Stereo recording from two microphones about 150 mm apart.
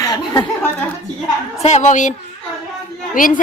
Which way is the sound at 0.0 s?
25° left (ahead or behind).